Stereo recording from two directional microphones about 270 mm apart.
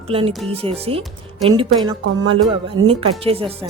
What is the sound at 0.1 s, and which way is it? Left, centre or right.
A woman's voice, centre.